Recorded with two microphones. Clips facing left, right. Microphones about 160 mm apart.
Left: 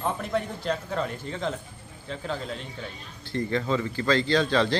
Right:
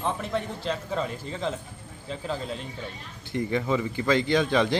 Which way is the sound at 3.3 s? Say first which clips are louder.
Even; 15° right (ahead or behind).